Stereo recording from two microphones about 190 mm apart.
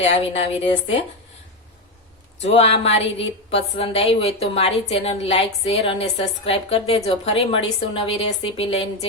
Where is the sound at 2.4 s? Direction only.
35° left (ahead or behind).